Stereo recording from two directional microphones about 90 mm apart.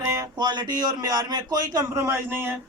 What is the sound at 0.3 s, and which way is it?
A man's voice, 55° right (ahead or behind).